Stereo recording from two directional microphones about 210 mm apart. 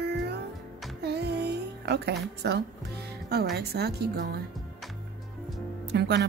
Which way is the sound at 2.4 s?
50° right (ahead or behind).